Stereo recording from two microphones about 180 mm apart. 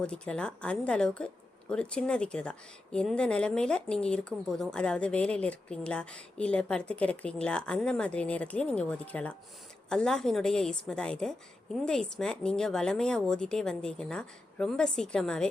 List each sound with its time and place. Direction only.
0.0 s speech: 5° left (ahead or behind)